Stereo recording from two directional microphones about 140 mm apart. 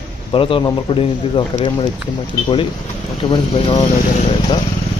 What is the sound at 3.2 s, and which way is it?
Speech, 35° left (ahead or behind).